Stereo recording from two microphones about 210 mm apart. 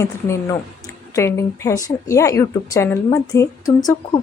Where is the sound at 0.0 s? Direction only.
15° left (ahead or behind).